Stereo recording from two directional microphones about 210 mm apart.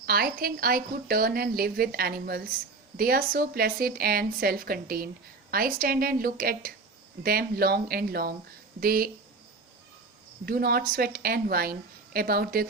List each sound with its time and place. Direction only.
0.0 s a woman's voice: 45° right (ahead or behind)
10.4 s a woman's voice: 45° right (ahead or behind)